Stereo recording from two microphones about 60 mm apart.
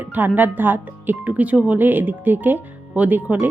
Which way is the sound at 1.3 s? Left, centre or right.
Right.